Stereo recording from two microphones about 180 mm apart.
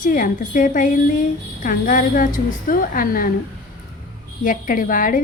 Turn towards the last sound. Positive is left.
turn(degrees=50)  # may be behind; listen again after turning